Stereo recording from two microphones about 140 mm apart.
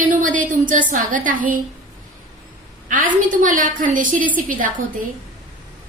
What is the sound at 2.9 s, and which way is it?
A woman's voice, 70° right (ahead or behind).